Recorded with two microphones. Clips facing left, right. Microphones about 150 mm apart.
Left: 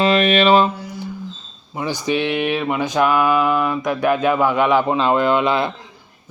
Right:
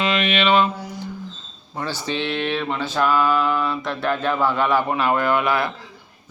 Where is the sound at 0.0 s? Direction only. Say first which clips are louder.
Left 6 dB; 40° left (ahead or behind).